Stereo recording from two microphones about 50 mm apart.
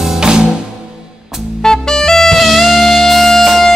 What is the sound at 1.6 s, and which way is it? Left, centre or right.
Saxophone, centre.